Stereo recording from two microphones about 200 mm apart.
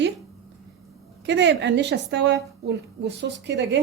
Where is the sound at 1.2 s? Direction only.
60° right (ahead or behind).